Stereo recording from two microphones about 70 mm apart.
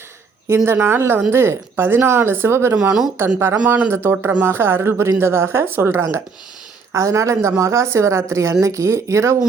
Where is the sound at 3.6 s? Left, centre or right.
Right.